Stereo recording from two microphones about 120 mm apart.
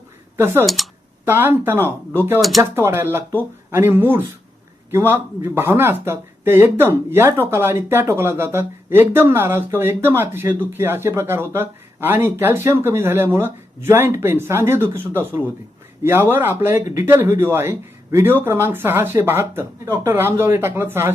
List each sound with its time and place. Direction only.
0.3 s speech: 20° right (ahead or behind)
0.6 s speech: centre (ahead or behind)
1.2 s speech: 20° right (ahead or behind)